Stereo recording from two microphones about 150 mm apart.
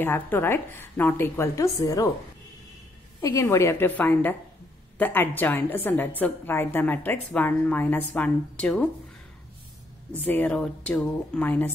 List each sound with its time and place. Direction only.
0.0 s a woman's voice: 15° left (ahead or behind)
3.2 s a woman's voice: 20° left (ahead or behind)
10.1 s a woman's voice: 15° left (ahead or behind)